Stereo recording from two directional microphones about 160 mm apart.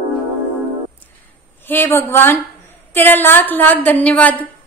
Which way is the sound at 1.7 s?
15° left (ahead or behind).